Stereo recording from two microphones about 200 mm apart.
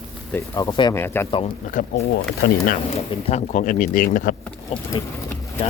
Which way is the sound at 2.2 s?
50° left (ahead or behind).